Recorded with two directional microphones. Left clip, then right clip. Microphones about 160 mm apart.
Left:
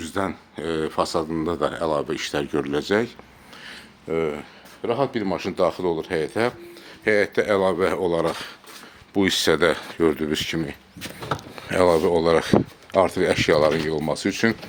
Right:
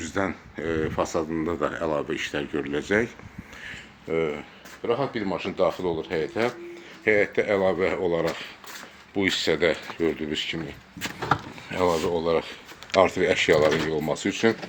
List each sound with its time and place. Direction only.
0.1 s speech: 25° left (ahead or behind)
2.8 s speech: 25° left (ahead or behind)
3.7 s a sound: 35° left (ahead or behind)
4.8 s speech: 55° left (ahead or behind)
11.7 s speech: 75° left (ahead or behind)
13.0 s speech: 35° left (ahead or behind)